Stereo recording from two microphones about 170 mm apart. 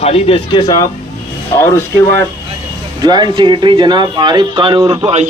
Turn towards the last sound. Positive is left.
turn(degrees=-40)  # may be behind; listen again after turning